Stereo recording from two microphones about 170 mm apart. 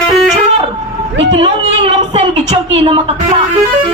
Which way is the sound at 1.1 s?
90° right.